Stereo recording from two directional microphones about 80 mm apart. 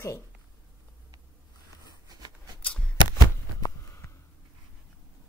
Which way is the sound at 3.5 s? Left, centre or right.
Left.